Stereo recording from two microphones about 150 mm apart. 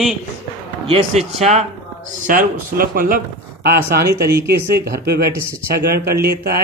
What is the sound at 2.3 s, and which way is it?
Speech, 65° right (ahead or behind).